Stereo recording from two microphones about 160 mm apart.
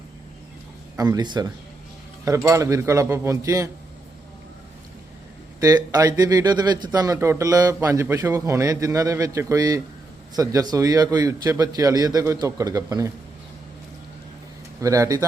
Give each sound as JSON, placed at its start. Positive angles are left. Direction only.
{"t": 0.9, "sound": "a man's voice", "side_deg": -25}
{"t": 5.5, "sound": "a man's voice", "side_deg": -25}
{"t": 14.8, "sound": "a man's voice", "side_deg": -20}